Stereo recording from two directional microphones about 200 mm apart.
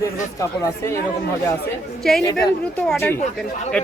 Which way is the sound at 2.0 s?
Centre (ahead or behind).